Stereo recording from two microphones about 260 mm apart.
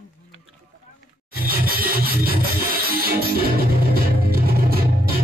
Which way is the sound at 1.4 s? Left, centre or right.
Right.